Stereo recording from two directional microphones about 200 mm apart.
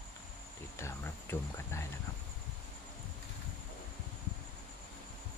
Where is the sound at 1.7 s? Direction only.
15° left (ahead or behind).